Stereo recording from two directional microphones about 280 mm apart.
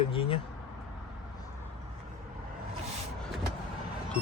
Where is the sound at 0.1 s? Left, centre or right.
Centre.